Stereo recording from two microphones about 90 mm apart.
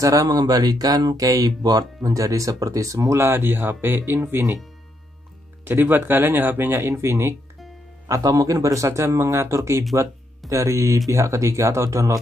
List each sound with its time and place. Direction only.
0.0 s speech: 40° right (ahead or behind)
5.7 s speech: 20° right (ahead or behind)
8.1 s speech: 40° right (ahead or behind)